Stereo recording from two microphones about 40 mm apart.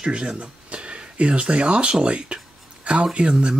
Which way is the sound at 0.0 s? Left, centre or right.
Right.